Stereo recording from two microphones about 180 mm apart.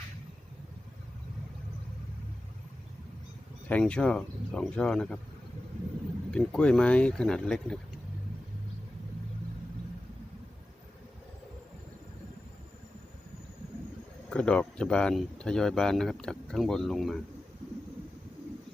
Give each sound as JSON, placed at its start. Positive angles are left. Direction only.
{"t": 3.7, "sound": "speech", "side_deg": 5}
{"t": 6.3, "sound": "speech", "side_deg": 5}
{"t": 14.3, "sound": "speech", "side_deg": 5}